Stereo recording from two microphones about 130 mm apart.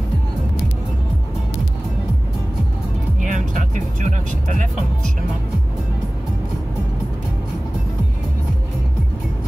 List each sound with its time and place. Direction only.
3.2 s music: 75° right (ahead or behind)